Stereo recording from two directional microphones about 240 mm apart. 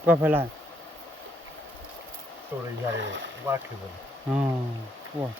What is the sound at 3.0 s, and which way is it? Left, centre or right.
Speech, right.